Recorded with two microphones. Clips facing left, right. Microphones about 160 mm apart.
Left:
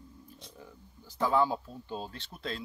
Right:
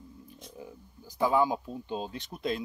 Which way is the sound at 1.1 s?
10° right (ahead or behind).